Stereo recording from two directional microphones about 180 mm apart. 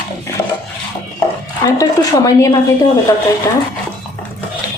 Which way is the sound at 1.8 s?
15° left (ahead or behind).